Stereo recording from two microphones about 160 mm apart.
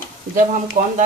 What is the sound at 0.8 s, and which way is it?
Speech, 60° right (ahead or behind).